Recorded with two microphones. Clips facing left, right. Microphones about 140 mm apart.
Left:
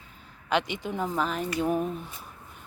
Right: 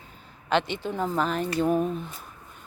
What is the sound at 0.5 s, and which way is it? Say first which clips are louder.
Speech: right 2 dB; 10° left (ahead or behind).